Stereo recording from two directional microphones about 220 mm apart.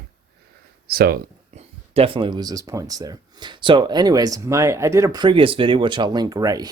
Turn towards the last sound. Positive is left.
turn(degrees=-15)  # may be behind; listen again after turning